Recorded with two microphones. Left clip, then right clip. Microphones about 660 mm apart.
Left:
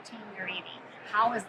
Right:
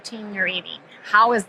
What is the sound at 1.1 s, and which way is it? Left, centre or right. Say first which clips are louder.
Speech: right 11 dB; right.